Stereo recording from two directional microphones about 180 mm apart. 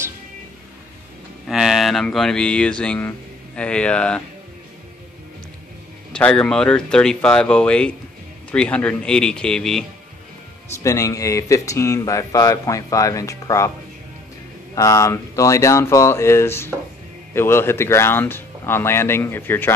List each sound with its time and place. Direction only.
1.5 s speech: centre (ahead or behind)
6.1 s speech: 5° left (ahead or behind)
10.8 s speech: 15° left (ahead or behind)
14.8 s speech: 15° left (ahead or behind)